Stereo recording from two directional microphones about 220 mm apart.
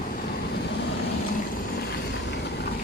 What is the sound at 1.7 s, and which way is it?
Vehicle, 45° left (ahead or behind).